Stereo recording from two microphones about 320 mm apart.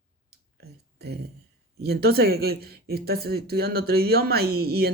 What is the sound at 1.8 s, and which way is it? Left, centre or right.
Speech, right.